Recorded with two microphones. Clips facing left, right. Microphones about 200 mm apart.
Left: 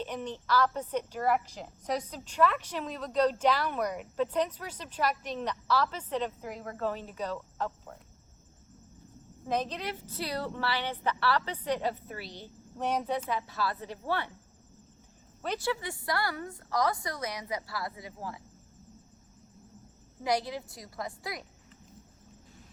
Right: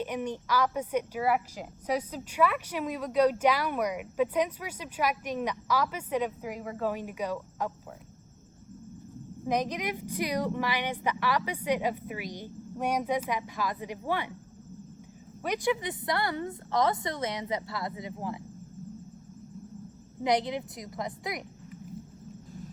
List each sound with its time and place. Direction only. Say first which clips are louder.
0.0 s a woman's voice: right 4 dB; 10° right (ahead or behind)
9.5 s a woman's voice: right 3 dB; 15° right (ahead or behind)
15.4 s a woman's voice: right 4 dB; 15° right (ahead or behind)
20.2 s a woman's voice: right 3 dB; 20° right (ahead or behind)